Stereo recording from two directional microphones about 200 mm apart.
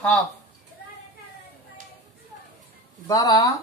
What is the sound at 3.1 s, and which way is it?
Speech, 20° left (ahead or behind).